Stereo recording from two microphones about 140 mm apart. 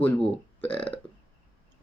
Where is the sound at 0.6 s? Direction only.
40° left (ahead or behind).